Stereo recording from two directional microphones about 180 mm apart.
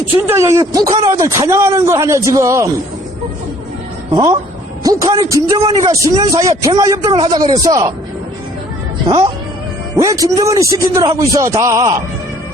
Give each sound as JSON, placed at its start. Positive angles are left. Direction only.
{"t": 0.3, "sound": "a man's voice", "side_deg": -15}
{"t": 4.1, "sound": "a man's voice", "side_deg": -20}
{"t": 9.0, "sound": "a man's voice", "side_deg": -25}